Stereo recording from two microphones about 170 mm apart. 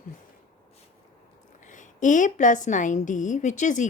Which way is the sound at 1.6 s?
45° left (ahead or behind).